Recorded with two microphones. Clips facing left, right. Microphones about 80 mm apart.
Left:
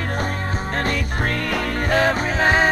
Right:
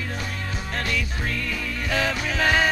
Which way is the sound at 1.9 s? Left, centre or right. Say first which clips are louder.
Left 5 dB; left.